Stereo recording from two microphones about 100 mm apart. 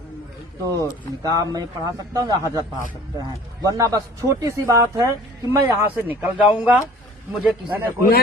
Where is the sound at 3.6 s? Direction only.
35° right (ahead or behind).